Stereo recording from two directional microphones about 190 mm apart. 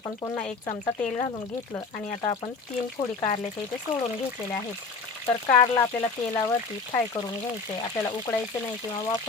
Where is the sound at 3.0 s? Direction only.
35° left (ahead or behind).